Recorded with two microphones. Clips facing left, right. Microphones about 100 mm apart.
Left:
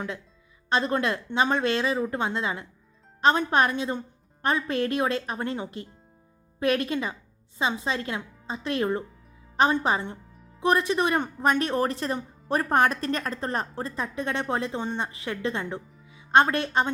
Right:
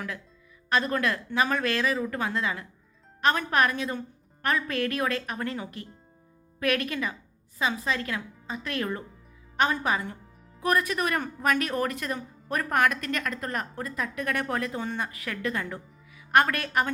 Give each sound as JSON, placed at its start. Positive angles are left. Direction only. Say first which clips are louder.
{"t": 0.7, "sound": "a woman's voice", "louder": "left 1 dB", "side_deg": 25}